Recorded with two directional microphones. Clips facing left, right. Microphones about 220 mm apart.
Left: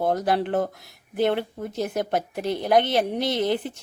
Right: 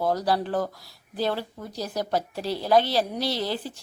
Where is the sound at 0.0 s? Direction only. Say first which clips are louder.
Left 2 dB; 20° left (ahead or behind).